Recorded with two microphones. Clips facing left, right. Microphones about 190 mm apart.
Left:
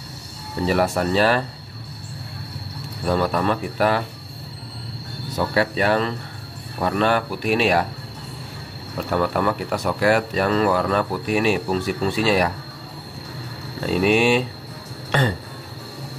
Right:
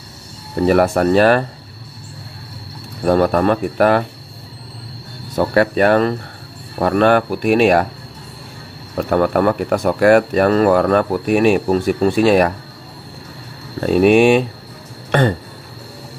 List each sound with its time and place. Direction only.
0.7 s speech: 55° right (ahead or behind)
3.1 s speech: 50° right (ahead or behind)
5.4 s speech: 55° right (ahead or behind)
8.9 s speech: 50° right (ahead or behind)
13.8 s speech: 50° right (ahead or behind)
15.0 s a sound: 55° right (ahead or behind)